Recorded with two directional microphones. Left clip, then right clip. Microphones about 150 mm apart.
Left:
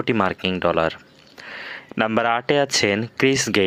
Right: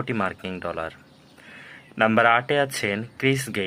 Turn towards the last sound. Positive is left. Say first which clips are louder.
# left 6 dB
turn(degrees=40)  # may be behind; listen again after turning